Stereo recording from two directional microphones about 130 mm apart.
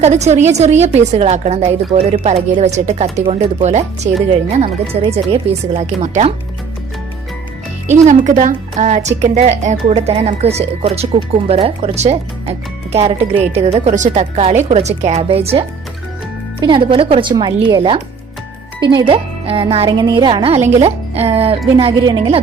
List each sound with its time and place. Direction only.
0.0 s speech: 60° right (ahead or behind)
1.9 s speech: 45° right (ahead or behind); by 4.1 s 60° right (ahead or behind)
4.6 s speech: 45° right (ahead or behind); by 6.3 s 60° right (ahead or behind)
7.9 s speech: 65° right (ahead or behind); by 13.9 s 50° right (ahead or behind)
13.9 s speech: 65° right (ahead or behind); by 15.6 s 50° right (ahead or behind)
16.6 s speech: 40° right (ahead or behind)
22.0 s speech: 35° right (ahead or behind)